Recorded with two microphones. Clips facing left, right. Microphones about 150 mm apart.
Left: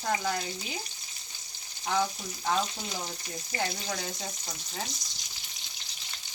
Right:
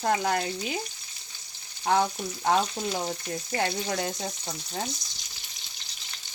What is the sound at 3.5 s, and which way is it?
Speech, 65° right (ahead or behind).